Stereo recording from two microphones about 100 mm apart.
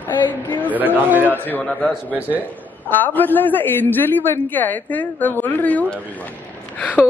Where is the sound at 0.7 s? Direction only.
15° right (ahead or behind).